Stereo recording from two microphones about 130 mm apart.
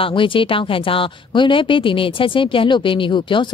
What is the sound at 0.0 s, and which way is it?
Speech, 40° left (ahead or behind).